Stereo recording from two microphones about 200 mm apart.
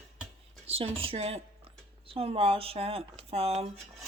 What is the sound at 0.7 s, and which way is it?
Speech, 25° right (ahead or behind).